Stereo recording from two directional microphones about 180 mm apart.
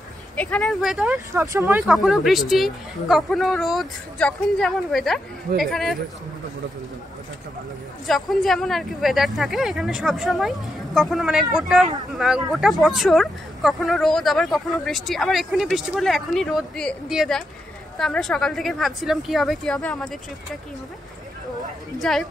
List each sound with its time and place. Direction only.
0.4 s speech: 5° left (ahead or behind)
1.4 s speech: 15° right (ahead or behind)
1.8 s speech: centre (ahead or behind)
8.1 s speech: centre (ahead or behind)
21.9 s speech: centre (ahead or behind)